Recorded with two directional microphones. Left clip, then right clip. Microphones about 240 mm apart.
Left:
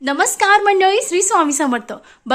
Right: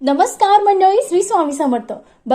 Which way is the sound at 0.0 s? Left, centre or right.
Centre.